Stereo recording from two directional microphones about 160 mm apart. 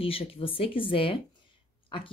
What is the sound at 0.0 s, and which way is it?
Speech, 35° left (ahead or behind).